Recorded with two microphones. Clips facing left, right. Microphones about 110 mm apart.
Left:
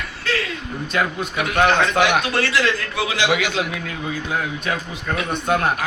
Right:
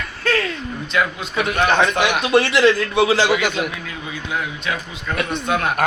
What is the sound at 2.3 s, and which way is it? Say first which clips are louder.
Speech: right 6 dB; 20° right (ahead or behind).